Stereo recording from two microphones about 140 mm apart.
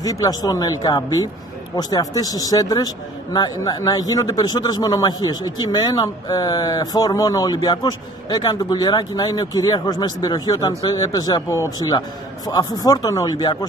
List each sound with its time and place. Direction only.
0.0 s speech: 25° left (ahead or behind)